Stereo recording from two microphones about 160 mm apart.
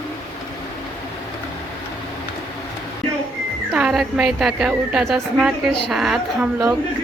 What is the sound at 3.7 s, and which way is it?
A woman's voice, 5° right (ahead or behind).